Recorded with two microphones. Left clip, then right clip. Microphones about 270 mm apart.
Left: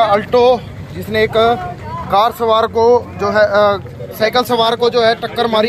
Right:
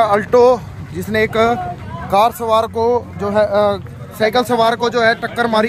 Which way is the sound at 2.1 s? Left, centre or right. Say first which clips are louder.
Left 1 dB; right.